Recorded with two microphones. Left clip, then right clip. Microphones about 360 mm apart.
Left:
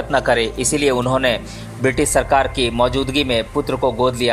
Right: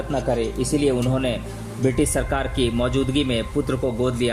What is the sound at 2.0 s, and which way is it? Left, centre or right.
A man's voice, centre.